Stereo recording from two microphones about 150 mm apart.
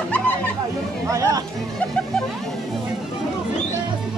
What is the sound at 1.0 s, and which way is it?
Speech, 20° right (ahead or behind).